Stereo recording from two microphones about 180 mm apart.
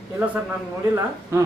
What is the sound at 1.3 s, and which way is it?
Speech, 15° right (ahead or behind).